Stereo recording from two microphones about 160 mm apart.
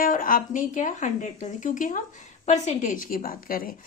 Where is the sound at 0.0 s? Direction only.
60° left (ahead or behind).